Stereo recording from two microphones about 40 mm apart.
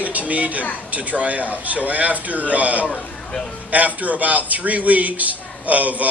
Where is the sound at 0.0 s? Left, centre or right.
Right.